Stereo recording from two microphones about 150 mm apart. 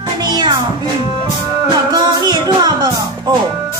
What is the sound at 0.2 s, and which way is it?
Music, 30° right (ahead or behind).